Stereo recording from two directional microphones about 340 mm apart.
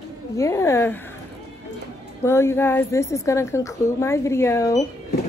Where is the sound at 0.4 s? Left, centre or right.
Centre.